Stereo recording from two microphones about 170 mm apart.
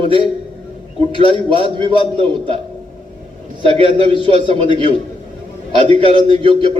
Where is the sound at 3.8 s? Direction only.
30° right (ahead or behind).